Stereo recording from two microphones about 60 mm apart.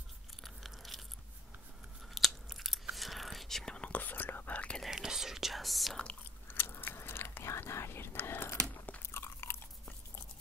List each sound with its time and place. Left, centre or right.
0.4 s biting: centre
2.1 s biting: centre
3.7 s whispering: left
4.8 s whispering: centre
6.4 s biting: left
8.6 s crunch: left
9.0 s biting: left